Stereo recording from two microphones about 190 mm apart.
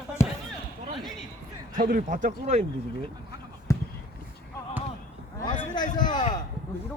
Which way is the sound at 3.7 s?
15° left (ahead or behind).